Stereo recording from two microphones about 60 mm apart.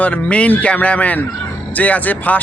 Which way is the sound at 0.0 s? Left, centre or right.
Left.